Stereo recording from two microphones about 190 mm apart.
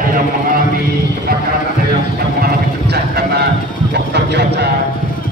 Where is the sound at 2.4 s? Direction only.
55° right (ahead or behind).